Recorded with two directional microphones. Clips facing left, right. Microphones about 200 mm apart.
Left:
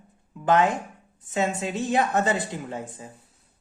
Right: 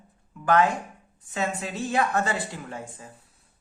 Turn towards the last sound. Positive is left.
turn(degrees=20)  # may be behind; listen again after turning